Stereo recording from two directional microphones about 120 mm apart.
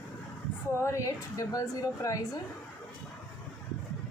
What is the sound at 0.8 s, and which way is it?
A woman's voice, 25° left (ahead or behind).